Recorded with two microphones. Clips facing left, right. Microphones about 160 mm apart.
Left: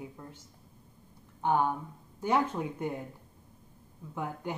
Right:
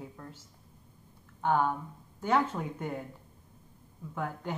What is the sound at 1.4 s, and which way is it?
Speech, 15° left (ahead or behind).